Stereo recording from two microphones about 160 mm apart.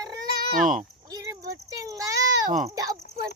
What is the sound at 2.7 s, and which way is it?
Cricket, 20° right (ahead or behind).